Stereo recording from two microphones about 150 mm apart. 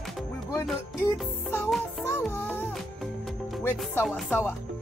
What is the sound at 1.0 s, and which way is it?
Music, 20° left (ahead or behind).